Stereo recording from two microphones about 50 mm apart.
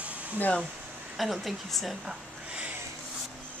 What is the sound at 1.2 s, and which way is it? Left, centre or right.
Speech, centre.